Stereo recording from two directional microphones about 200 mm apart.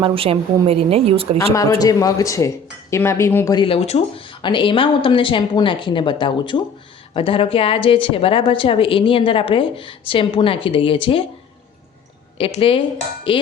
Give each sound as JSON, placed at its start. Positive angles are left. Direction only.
{"t": 0.0, "sound": "a woman's voice", "side_deg": -25}
{"t": 1.8, "sound": "speech", "side_deg": 15}
{"t": 12.4, "sound": "speech", "side_deg": 30}